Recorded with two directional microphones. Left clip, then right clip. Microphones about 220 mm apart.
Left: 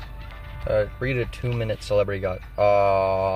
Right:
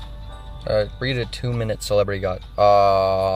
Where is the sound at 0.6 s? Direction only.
10° right (ahead or behind).